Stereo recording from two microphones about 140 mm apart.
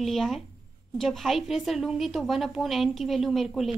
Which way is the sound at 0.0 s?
Centre (ahead or behind).